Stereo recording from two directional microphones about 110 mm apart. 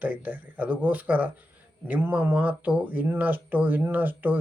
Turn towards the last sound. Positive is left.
turn(degrees=-15)  # may be behind; listen again after turning